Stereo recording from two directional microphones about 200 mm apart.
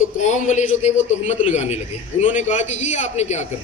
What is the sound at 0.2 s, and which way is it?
A man's voice, 35° left (ahead or behind).